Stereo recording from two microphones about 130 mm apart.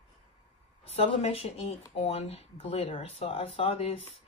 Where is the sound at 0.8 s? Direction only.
50° left (ahead or behind).